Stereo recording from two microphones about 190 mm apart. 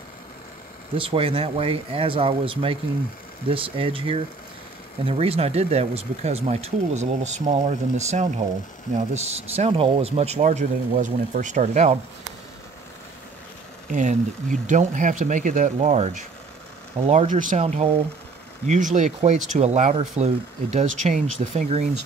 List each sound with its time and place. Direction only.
0.9 s speech: 30° right (ahead or behind)
13.8 s speech: 40° right (ahead or behind)